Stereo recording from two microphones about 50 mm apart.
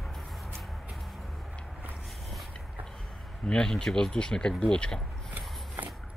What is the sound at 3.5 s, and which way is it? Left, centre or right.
Speech, centre.